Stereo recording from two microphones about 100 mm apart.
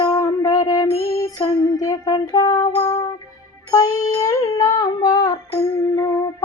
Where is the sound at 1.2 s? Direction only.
40° left (ahead or behind).